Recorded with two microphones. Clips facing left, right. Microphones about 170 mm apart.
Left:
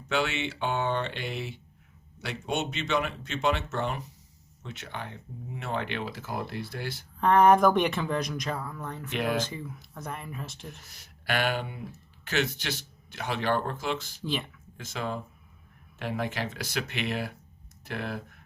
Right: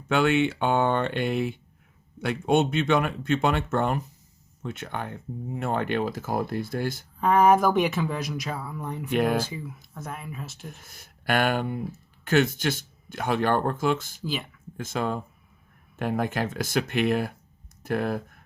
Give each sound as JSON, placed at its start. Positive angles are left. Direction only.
{"t": 0.1, "sound": "speech", "side_deg": -55}
{"t": 7.2, "sound": "speech", "side_deg": -5}
{"t": 9.1, "sound": "speech", "side_deg": -45}
{"t": 9.4, "sound": "speech", "side_deg": -5}
{"t": 10.8, "sound": "speech", "side_deg": -50}
{"t": 14.2, "sound": "speech", "side_deg": -5}
{"t": 14.8, "sound": "speech", "side_deg": -50}